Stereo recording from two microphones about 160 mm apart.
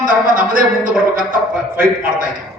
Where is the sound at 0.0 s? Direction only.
55° right (ahead or behind).